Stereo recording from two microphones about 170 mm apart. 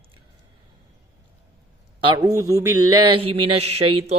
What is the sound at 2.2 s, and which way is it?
Speech, 20° right (ahead or behind).